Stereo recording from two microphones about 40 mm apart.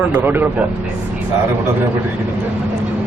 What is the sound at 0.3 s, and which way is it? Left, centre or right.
Speech, right.